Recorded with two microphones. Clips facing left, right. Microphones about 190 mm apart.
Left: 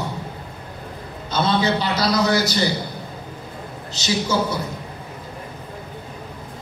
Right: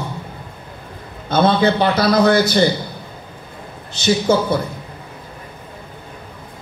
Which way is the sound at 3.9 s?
55° right (ahead or behind).